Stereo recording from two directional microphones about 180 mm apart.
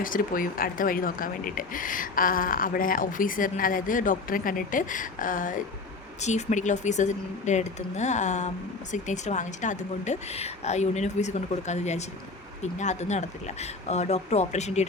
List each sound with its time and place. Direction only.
0.0 s a woman's voice: 50° left (ahead or behind)